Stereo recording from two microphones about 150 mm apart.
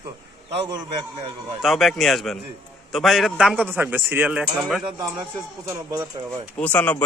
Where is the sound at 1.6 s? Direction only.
Centre (ahead or behind).